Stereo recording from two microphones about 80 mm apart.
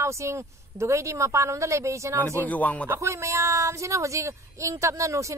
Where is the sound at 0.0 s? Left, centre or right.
Right.